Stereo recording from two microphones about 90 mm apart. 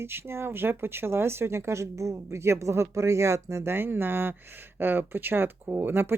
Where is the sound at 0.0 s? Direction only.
25° right (ahead or behind).